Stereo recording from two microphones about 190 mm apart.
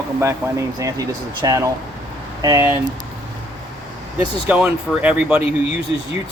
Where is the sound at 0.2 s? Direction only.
15° right (ahead or behind).